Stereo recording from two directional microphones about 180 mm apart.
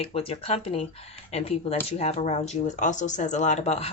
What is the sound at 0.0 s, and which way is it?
Speech, 30° left (ahead or behind).